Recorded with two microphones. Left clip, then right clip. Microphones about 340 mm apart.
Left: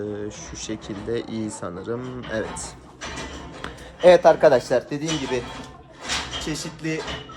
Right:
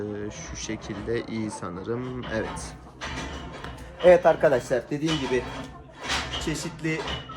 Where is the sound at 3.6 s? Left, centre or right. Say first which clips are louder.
Left 3 dB; left.